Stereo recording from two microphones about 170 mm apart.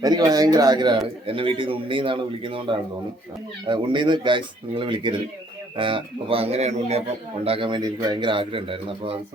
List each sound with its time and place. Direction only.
0.0 s a man's voice: 20° right (ahead or behind)